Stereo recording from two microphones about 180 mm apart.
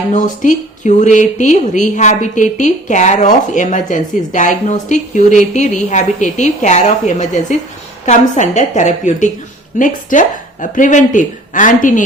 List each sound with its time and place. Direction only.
0.1 s a woman's voice: 45° left (ahead or behind)